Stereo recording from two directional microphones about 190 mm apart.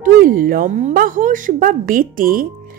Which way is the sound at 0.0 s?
45° right (ahead or behind).